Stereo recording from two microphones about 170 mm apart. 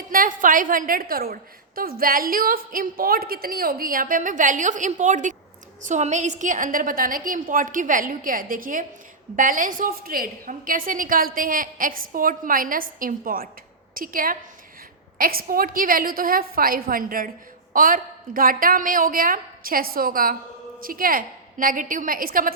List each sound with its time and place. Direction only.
0.1 s a woman's voice: 55° right (ahead or behind)